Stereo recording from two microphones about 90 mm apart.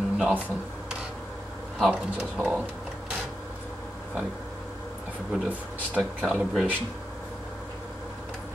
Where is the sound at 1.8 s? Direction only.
10° right (ahead or behind).